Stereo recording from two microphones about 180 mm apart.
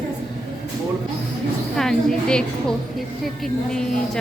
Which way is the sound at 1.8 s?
5° left (ahead or behind).